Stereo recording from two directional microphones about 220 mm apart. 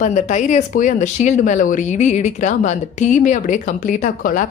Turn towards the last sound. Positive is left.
turn(degrees=35)  # may be behind; listen again after turning